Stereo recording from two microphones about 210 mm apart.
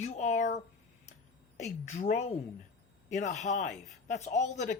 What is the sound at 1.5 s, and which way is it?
Speech, 35° left (ahead or behind).